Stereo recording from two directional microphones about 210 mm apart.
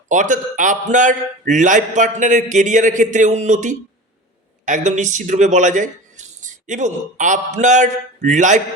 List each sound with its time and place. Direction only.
0.1 s a man's voice: 35° right (ahead or behind)